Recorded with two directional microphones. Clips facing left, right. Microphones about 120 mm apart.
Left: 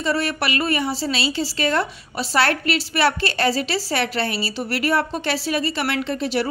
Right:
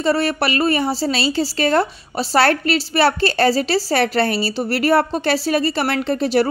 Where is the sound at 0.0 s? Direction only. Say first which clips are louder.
Right 5 dB; 35° right (ahead or behind).